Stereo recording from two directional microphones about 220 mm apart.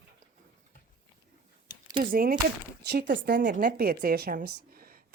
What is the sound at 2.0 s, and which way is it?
Speech, 40° right (ahead or behind).